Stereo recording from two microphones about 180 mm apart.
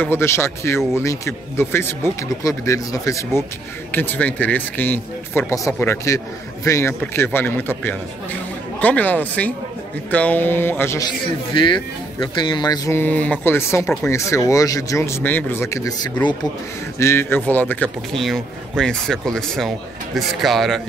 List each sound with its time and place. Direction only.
0.0 s speech: 15° left (ahead or behind)
11.5 s speech: 25° left (ahead or behind); by 20.8 s centre (ahead or behind)